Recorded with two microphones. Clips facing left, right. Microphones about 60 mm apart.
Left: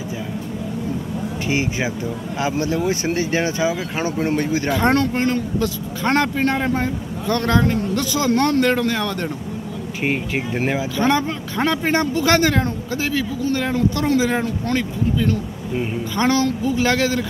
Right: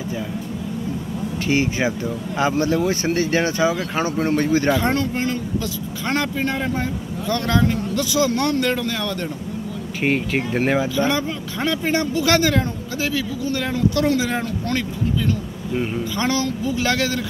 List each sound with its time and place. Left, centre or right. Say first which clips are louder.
1.4 s speech: right 3 dB; centre
4.7 s speech: left 3 dB; left
10.0 s speech: right 2 dB; centre
11.0 s speech: left 2 dB; left
15.7 s speech: even; centre
16.2 s speech: left 5 dB; left